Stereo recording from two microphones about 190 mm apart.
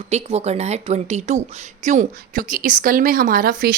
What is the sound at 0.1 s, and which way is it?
A woman's voice, 35° right (ahead or behind).